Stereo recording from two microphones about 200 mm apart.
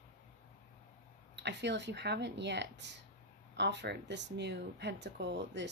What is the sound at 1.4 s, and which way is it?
Speech, 60° right (ahead or behind).